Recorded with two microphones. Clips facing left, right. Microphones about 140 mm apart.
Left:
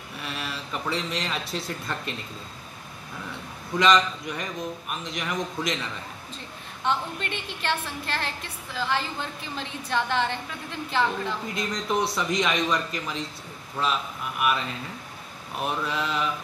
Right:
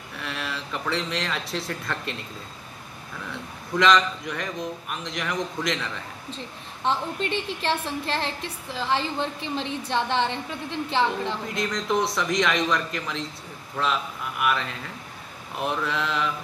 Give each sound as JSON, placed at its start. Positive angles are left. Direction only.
{"t": 0.2, "sound": "speech", "side_deg": 5}
{"t": 3.8, "sound": "speech", "side_deg": 0}
{"t": 6.3, "sound": "a woman's voice", "side_deg": -30}
{"t": 11.5, "sound": "speech", "side_deg": 0}
{"t": 14.4, "sound": "speech", "side_deg": 5}